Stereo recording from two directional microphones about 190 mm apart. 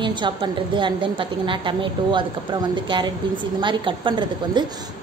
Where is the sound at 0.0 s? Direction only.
25° right (ahead or behind).